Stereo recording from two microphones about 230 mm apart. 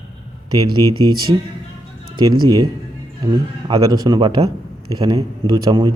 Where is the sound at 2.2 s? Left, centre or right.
Centre.